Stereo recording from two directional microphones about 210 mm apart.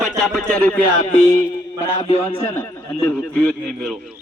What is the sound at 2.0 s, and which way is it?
Speech, 30° left (ahead or behind).